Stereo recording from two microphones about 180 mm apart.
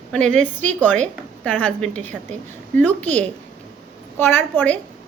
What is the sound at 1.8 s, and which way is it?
Speech, 40° right (ahead or behind).